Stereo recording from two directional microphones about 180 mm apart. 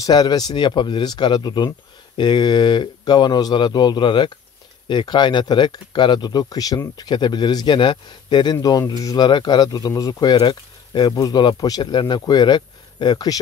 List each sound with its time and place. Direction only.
0.0 s speech: 20° left (ahead or behind)